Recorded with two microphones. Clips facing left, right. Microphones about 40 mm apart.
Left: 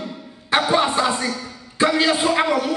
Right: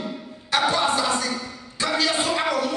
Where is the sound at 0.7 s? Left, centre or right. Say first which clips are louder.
Left 3 dB; left.